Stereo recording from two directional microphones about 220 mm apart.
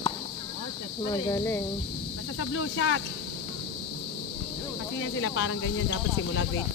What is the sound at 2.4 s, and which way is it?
Speech, 65° left (ahead or behind).